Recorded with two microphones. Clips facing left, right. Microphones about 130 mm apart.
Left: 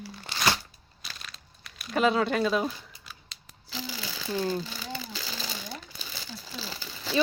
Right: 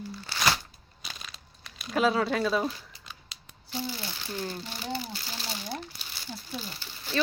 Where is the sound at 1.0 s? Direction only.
Centre (ahead or behind).